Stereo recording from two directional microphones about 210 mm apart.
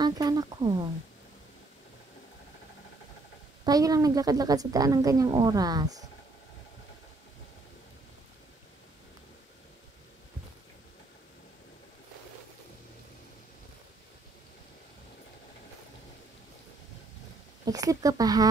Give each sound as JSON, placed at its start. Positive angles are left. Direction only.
{"t": 0.0, "sound": "a sound", "side_deg": -20}
{"t": 3.6, "sound": "a woman's voice", "side_deg": -15}
{"t": 17.6, "sound": "a woman's voice", "side_deg": -15}